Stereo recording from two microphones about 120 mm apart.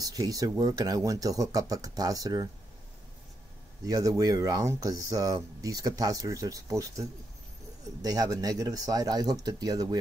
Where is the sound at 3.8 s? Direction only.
30° right (ahead or behind).